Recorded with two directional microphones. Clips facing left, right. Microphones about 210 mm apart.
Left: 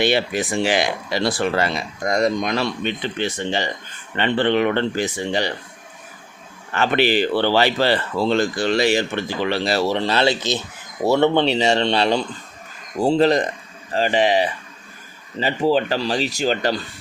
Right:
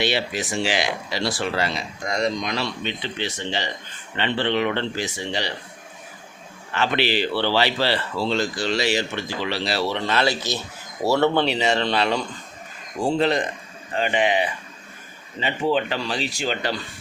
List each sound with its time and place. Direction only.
0.0 s speech: 50° left (ahead or behind)
6.7 s speech: 45° left (ahead or behind)
10.0 s speech: 30° left (ahead or behind)
11.4 s speech: 30° left (ahead or behind)